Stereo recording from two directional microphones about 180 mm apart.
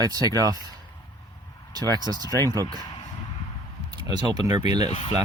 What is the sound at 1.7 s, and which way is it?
Speech, 20° right (ahead or behind).